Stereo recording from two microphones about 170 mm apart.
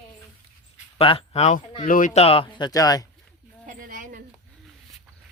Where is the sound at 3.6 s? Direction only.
55° right (ahead or behind).